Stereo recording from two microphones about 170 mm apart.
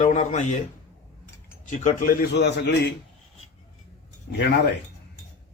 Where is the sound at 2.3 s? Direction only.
80° left.